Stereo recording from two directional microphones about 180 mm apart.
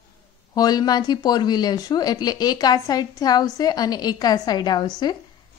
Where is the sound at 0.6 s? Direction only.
20° left (ahead or behind).